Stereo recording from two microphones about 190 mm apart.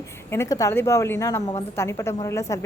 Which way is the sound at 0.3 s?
15° left (ahead or behind).